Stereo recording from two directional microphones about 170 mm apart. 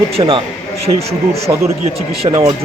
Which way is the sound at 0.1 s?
30° right (ahead or behind).